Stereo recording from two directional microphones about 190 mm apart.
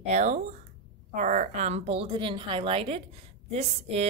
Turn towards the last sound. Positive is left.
turn(degrees=-35)  # may be behind; listen again after turning